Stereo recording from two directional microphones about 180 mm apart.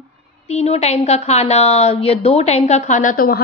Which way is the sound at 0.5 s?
35° left (ahead or behind).